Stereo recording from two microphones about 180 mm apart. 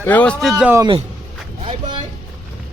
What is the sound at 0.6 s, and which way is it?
Speech, 10° right (ahead or behind).